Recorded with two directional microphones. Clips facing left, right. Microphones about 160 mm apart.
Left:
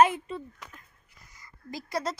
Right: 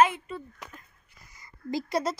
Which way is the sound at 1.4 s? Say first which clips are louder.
Right 9 dB; 25° right (ahead or behind).